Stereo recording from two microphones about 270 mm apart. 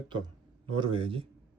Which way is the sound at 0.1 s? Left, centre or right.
Centre.